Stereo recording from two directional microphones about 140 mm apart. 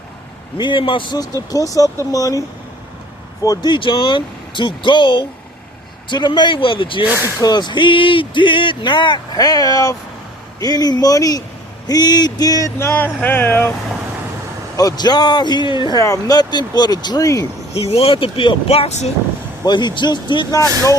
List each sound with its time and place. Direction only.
0.5 s speech: 35° left (ahead or behind)
1.5 s a sound: 25° left (ahead or behind)
3.4 s speech: 30° left (ahead or behind)
7.0 s speech: 10° right (ahead or behind)
7.3 s speech: 30° left (ahead or behind)
10.6 s a sound: 25° left (ahead or behind)
12.9 s speech: 10° left (ahead or behind)
14.8 s speech: 30° left (ahead or behind)
17.7 s speech: 45° left (ahead or behind)
19.6 s speech: 30° left (ahead or behind)